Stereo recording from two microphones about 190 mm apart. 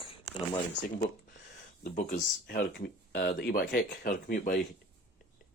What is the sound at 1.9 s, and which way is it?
Speech, 50° left (ahead or behind).